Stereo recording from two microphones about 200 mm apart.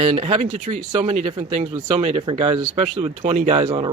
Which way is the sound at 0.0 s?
35° right (ahead or behind).